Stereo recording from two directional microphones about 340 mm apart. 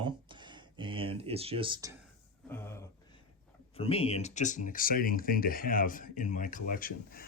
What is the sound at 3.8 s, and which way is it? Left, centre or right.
Speech, centre.